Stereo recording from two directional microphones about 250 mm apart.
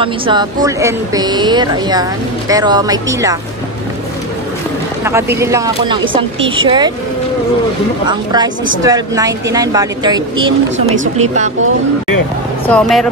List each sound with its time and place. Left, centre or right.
0.0 s speech: centre
5.0 s speech: centre
8.1 s speech: centre
12.6 s speech: centre